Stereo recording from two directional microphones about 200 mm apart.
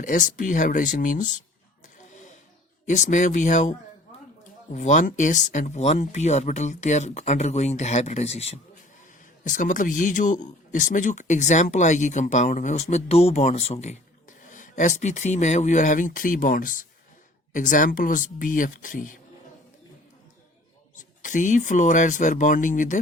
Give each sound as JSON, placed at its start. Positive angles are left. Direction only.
{"t": 0.0, "sound": "speech", "side_deg": 40}
{"t": 2.8, "sound": "speech", "side_deg": 40}
{"t": 20.9, "sound": "speech", "side_deg": 40}